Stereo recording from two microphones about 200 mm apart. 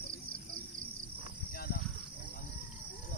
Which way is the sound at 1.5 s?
50° left (ahead or behind).